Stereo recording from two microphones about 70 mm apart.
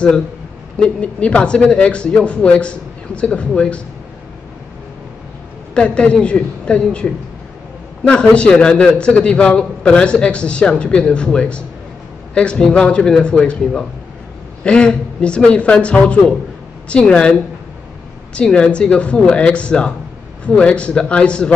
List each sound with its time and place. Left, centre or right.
0.7 s a man's voice: centre
5.8 s a man's voice: centre
8.1 s a man's voice: centre